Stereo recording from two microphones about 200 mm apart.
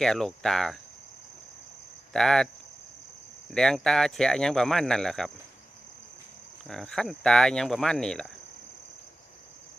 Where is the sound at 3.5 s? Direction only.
Centre (ahead or behind).